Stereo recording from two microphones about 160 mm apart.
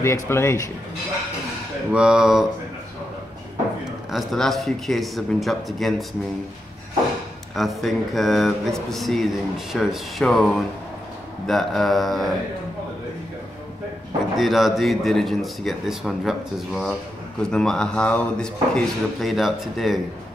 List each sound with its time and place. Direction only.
0.0 s a man's voice: 15° left (ahead or behind)
1.9 s speech: 5° right (ahead or behind)
4.1 s speech: centre (ahead or behind)
7.5 s speech: centre (ahead or behind)
14.3 s speech: centre (ahead or behind)